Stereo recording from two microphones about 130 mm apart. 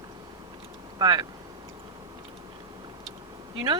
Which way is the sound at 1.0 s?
35° right (ahead or behind).